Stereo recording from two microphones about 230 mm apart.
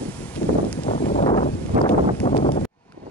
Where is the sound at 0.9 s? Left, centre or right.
Left.